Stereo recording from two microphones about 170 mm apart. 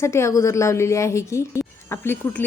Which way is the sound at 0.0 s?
15° left (ahead or behind).